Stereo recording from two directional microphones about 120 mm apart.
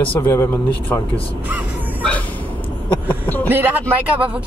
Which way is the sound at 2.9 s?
15° left (ahead or behind).